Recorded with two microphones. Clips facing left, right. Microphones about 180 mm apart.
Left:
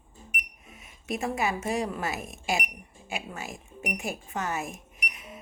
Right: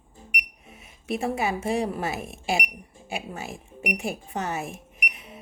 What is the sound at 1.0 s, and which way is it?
Speech, 30° right (ahead or behind).